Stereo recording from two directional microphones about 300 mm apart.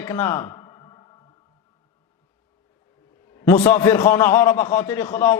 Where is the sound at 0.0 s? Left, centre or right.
Centre.